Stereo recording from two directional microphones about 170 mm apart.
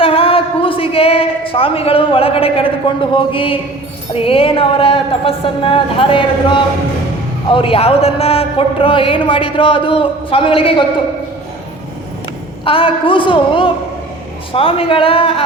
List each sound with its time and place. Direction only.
0.0 s a sound: 35° left (ahead or behind)
4.1 s a man's voice: 35° left (ahead or behind)
12.6 s a man's voice: 30° left (ahead or behind)